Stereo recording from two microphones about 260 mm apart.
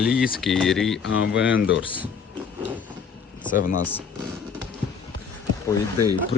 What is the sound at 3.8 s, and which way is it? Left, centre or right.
Speech, centre.